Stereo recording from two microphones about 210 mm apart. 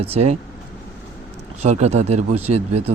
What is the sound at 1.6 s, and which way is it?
Speech, 30° right (ahead or behind).